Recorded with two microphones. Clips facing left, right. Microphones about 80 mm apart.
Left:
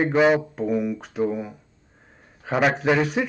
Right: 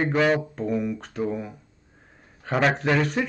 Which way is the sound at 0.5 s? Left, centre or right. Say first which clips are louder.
Left 2 dB; centre.